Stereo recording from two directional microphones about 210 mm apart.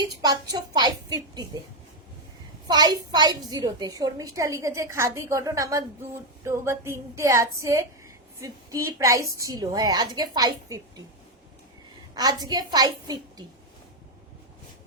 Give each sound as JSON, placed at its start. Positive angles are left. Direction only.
{"t": 0.5, "sound": "a woman's voice", "side_deg": -20}
{"t": 2.6, "sound": "a woman's voice", "side_deg": -20}
{"t": 12.1, "sound": "a woman's voice", "side_deg": -20}